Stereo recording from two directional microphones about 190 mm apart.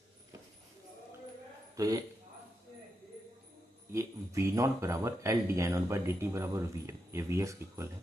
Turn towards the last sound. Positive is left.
turn(degrees=-15)  # may be behind; listen again after turning